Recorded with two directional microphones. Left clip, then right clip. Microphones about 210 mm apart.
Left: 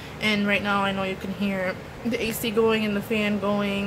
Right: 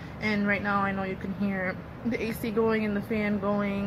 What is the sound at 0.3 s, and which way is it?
Speech, 15° left (ahead or behind).